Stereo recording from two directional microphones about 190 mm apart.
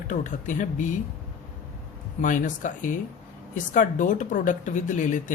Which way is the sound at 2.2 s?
45° left (ahead or behind).